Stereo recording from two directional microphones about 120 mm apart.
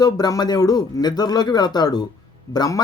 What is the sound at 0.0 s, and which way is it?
Speech, 35° left (ahead or behind).